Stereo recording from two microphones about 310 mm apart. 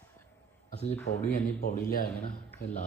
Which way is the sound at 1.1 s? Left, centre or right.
Left.